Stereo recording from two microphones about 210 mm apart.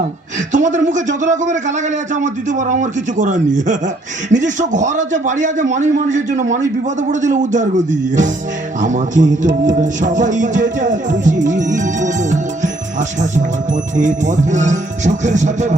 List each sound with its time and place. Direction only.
0.5 s speech: 35° right (ahead or behind)